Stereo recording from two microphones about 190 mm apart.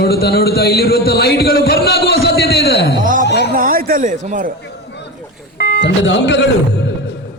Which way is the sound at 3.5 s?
45° right (ahead or behind).